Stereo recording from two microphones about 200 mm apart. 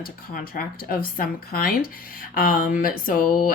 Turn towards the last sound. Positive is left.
turn(degrees=45)  # may be behind; listen again after turning